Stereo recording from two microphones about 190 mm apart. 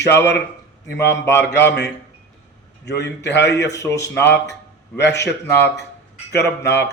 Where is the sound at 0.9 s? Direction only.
65° left (ahead or behind).